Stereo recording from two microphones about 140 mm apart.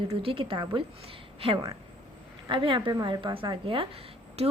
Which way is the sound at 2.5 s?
35° right (ahead or behind).